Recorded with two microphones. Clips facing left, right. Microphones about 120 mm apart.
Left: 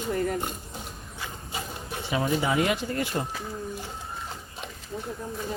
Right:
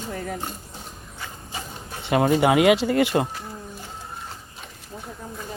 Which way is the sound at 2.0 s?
65° right (ahead or behind).